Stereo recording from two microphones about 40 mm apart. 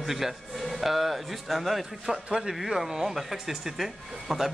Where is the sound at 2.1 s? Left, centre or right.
Centre.